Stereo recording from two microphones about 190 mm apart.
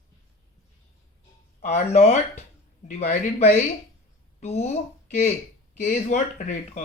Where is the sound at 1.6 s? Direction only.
35° left (ahead or behind).